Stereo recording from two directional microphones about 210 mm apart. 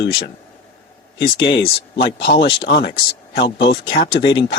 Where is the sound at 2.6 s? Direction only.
50° left (ahead or behind).